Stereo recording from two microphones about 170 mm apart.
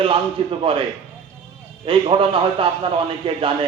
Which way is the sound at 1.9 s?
30° right (ahead or behind).